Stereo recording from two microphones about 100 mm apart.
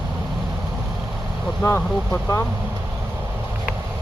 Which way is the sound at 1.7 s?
25° left (ahead or behind).